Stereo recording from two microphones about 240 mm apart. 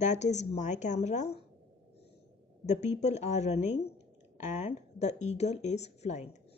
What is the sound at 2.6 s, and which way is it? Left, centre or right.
Speech, left.